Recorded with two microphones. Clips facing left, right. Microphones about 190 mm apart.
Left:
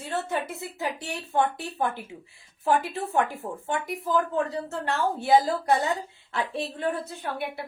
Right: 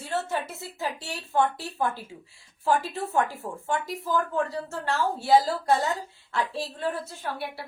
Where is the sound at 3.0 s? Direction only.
20° left (ahead or behind).